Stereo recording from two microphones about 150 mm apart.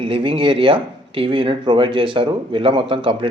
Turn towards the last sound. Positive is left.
turn(degrees=-35)  # may be behind; listen again after turning